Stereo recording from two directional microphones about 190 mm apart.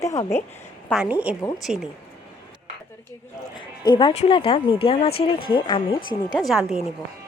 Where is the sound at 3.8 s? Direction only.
25° left (ahead or behind).